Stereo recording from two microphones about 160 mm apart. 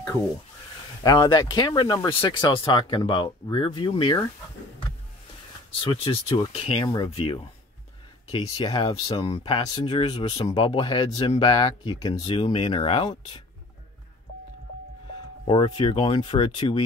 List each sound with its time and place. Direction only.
1.0 s speech: 25° left (ahead or behind)
5.8 s speech: 35° left (ahead or behind)
15.4 s speech: 30° left (ahead or behind)